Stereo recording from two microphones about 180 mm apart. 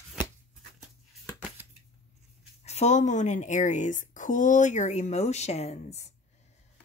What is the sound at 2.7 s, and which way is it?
Speech, 40° left (ahead or behind).